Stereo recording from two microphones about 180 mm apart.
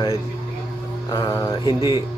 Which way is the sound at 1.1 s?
20° left (ahead or behind).